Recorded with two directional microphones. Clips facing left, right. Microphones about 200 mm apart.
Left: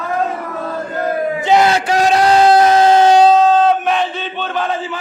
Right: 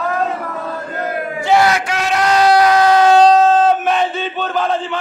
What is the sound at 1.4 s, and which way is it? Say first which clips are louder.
Crowd: even; 20° left (ahead or behind).